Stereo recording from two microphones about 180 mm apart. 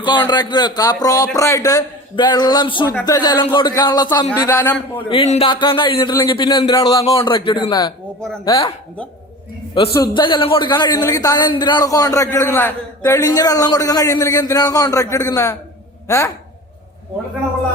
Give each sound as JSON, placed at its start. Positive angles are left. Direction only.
{"t": 0.0, "sound": "a man's voice", "side_deg": 25}
{"t": 5.0, "sound": "a man's voice", "side_deg": 35}
{"t": 9.9, "sound": "a man's voice", "side_deg": 25}